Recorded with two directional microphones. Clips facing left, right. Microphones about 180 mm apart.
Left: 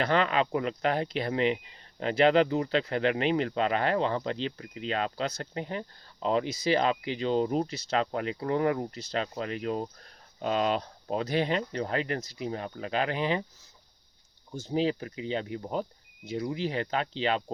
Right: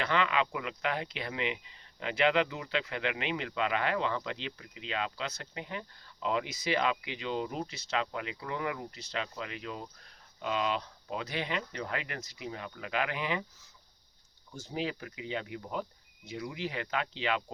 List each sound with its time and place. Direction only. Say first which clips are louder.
0.0 s speech: left 4 dB; 40° left (ahead or behind)
14.5 s speech: left 8 dB; 30° left (ahead or behind)